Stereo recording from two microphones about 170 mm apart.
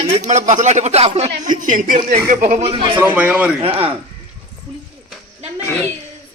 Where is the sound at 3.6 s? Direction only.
35° right (ahead or behind).